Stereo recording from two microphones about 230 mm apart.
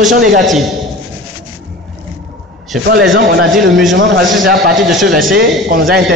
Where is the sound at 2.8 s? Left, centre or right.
Right.